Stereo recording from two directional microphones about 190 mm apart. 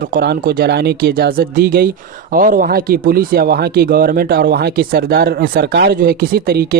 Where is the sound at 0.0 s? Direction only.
60° right (ahead or behind).